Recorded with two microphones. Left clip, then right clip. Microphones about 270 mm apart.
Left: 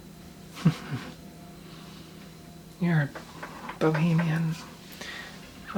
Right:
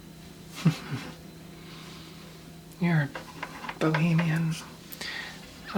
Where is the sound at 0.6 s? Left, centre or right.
Centre.